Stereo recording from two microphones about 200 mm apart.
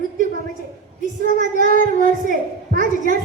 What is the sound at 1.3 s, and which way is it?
A child's voice, 45° right (ahead or behind).